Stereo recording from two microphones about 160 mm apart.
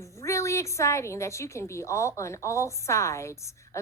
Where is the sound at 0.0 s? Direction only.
20° left (ahead or behind).